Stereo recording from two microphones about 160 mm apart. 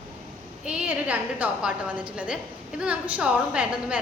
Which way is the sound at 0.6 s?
5° right (ahead or behind).